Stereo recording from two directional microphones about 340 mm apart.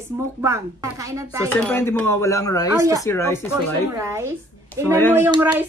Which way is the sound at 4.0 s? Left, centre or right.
Centre.